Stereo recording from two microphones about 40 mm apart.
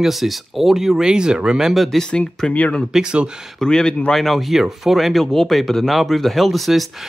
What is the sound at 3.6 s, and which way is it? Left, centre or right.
Speech, centre.